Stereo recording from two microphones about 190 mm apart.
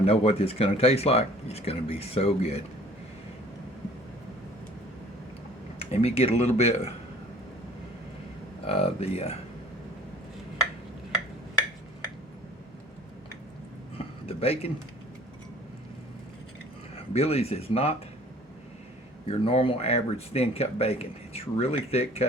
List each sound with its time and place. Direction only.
0.0 s speech: 30° left (ahead or behind)
5.8 s speech: 35° left (ahead or behind)
8.6 s speech: 30° left (ahead or behind)
14.0 s a sound: 30° left (ahead or behind)
17.2 s speech: 30° left (ahead or behind)
19.3 s speech: 30° left (ahead or behind)